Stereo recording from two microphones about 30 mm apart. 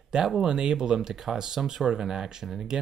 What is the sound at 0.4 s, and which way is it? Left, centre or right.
Speech, right.